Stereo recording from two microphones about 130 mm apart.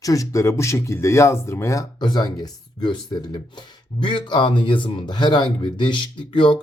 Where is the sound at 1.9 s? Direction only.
35° left (ahead or behind).